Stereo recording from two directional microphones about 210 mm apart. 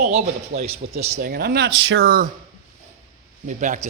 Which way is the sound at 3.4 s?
35° right (ahead or behind).